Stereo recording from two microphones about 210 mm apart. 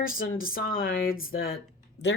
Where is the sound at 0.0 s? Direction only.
45° left (ahead or behind).